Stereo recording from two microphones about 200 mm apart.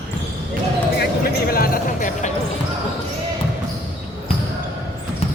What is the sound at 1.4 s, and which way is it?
Speech, 45° left (ahead or behind).